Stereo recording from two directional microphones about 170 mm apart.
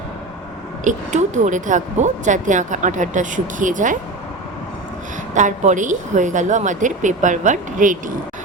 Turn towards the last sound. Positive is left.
turn(degrees=-50)  # may be behind; listen again after turning